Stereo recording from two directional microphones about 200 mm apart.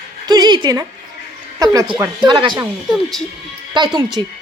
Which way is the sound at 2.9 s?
Centre (ahead or behind).